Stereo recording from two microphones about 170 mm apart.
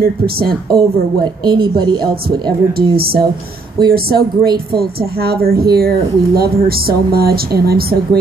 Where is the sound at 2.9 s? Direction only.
65° right (ahead or behind).